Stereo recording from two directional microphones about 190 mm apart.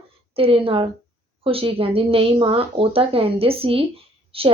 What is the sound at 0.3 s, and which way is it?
A woman's voice, 30° right (ahead or behind).